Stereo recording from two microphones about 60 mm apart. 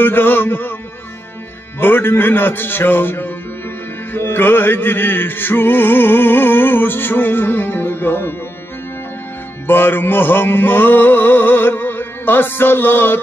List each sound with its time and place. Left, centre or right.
0.0 s music: left
1.8 s music: left
9.7 s music: left